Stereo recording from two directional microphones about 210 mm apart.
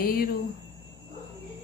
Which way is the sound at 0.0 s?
45° left (ahead or behind).